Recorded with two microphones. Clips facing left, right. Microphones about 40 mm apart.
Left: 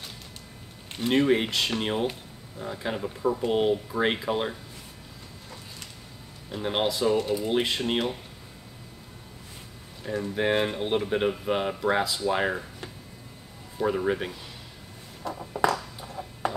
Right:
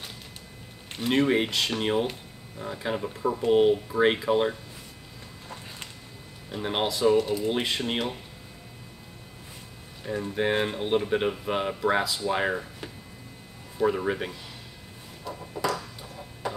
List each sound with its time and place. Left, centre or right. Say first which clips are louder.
0.9 s speech: left 1 dB; centre
6.5 s speech: left 1 dB; centre
10.3 s speech: left 1 dB; centre
15.5 s a sound: left 5 dB; left